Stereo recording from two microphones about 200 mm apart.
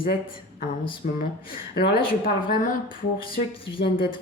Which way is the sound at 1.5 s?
50° left (ahead or behind).